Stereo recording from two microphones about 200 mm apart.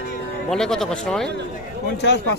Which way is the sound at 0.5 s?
Centre (ahead or behind).